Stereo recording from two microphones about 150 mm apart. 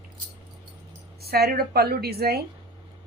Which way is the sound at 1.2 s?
90° right.